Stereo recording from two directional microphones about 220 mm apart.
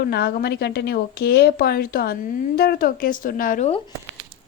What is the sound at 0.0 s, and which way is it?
A woman's voice, 45° left (ahead or behind).